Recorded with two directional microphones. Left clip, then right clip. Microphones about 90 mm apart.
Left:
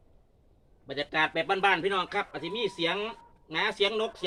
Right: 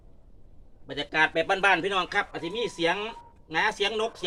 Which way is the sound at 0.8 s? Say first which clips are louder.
Right 3 dB; 20° right (ahead or behind).